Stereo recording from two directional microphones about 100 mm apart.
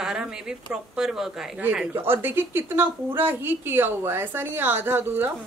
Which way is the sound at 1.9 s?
25° right (ahead or behind).